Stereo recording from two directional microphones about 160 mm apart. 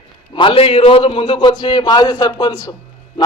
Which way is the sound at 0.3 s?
35° left (ahead or behind).